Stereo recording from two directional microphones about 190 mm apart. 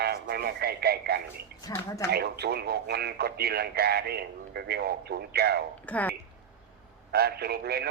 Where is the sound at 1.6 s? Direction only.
15° left (ahead or behind).